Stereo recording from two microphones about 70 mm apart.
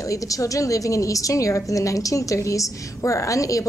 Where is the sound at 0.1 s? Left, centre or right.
Left.